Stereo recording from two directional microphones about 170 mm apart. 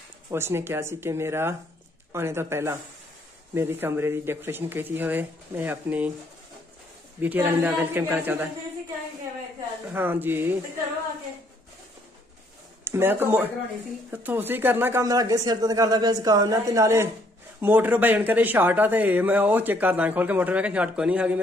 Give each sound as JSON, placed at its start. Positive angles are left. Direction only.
{"t": 0.3, "sound": "speech", "side_deg": -15}
{"t": 7.2, "sound": "speech", "side_deg": -10}
{"t": 9.9, "sound": "speech", "side_deg": -10}
{"t": 12.8, "sound": "speech", "side_deg": -15}